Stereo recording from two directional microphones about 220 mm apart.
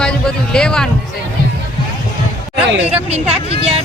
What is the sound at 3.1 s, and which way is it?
Speech, 30° right (ahead or behind).